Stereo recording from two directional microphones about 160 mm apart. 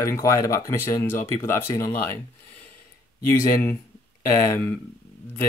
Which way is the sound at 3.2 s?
15° left (ahead or behind).